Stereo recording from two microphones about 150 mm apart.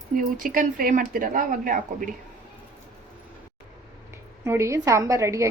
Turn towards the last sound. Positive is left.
turn(degrees=-20)  # may be behind; listen again after turning